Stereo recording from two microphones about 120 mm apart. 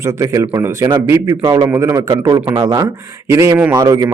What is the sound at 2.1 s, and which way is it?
A man's voice, 30° right (ahead or behind).